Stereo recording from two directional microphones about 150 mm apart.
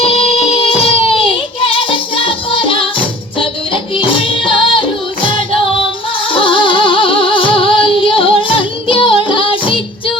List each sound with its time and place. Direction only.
0.0 s music: 40° left (ahead or behind)
6.3 s music: 35° left (ahead or behind)